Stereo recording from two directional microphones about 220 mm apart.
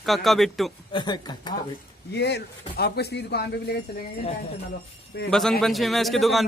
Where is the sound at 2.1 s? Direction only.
50° left (ahead or behind).